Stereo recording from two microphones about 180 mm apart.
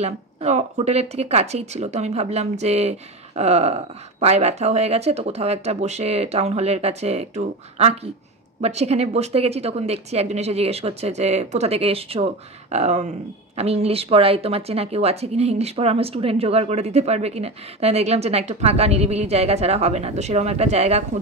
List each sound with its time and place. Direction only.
0.0 s speech: 35° right (ahead or behind)